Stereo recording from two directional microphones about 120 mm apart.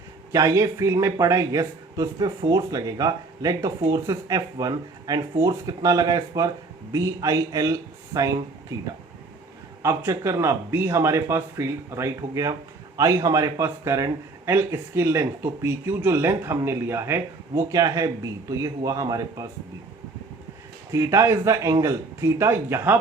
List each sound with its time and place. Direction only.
0.3 s speech: 25° right (ahead or behind)
2.1 s speech: 35° right (ahead or behind)
9.8 s speech: 25° right (ahead or behind)
20.9 s speech: 25° right (ahead or behind)